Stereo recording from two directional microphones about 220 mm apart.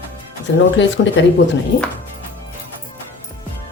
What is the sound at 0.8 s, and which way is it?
Speech, 55° left (ahead or behind).